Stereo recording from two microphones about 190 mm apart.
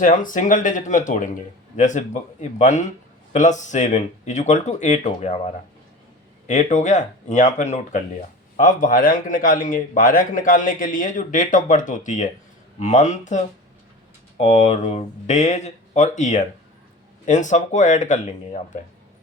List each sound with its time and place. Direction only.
0.0 s a man's voice: 45° left (ahead or behind)
6.5 s a man's voice: 40° left (ahead or behind)